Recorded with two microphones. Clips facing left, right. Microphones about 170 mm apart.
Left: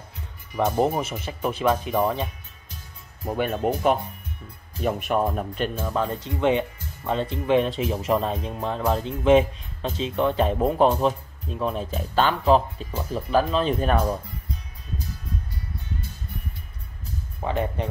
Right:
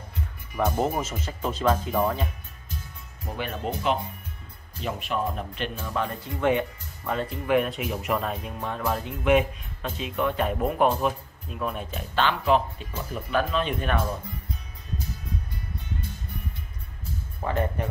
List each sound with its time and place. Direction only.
0.7 s speech: 15° left (ahead or behind)
3.3 s speech: 50° left (ahead or behind)
6.2 s speech: 20° left (ahead or behind); by 14.1 s 35° left (ahead or behind)
17.4 s speech: 20° left (ahead or behind)